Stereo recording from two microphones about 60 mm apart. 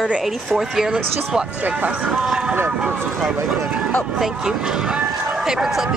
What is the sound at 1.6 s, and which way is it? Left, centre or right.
Speech, right.